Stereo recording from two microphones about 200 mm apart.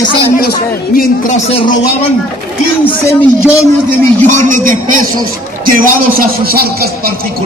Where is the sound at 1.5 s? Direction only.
30° left (ahead or behind).